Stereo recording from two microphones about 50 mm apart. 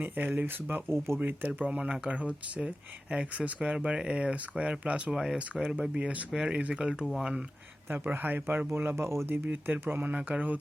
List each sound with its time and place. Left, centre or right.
0.0 s speech: right
0.4 s speech: right
1.2 s speech: right
5.1 s speech: centre
7.9 s speech: right
8.4 s speech: right
9.0 s speech: right
9.3 s speech: right
10.1 s speech: right